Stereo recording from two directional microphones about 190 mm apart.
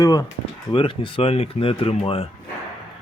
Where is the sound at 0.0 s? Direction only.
20° left (ahead or behind).